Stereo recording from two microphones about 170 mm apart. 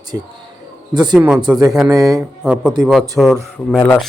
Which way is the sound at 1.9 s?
20° right (ahead or behind).